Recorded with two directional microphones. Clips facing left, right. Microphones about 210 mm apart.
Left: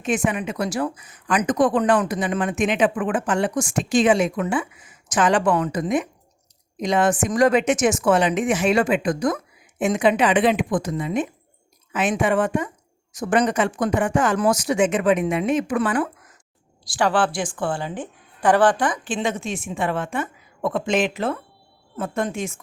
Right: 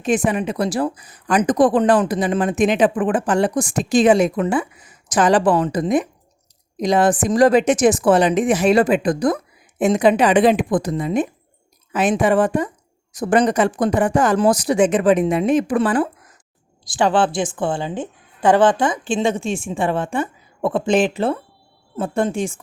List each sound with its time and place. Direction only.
0.0 s speech: 35° right (ahead or behind)
16.8 s a woman's voice: 20° right (ahead or behind)